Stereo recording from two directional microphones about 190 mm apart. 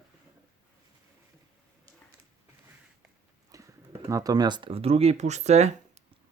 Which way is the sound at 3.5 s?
15° right (ahead or behind).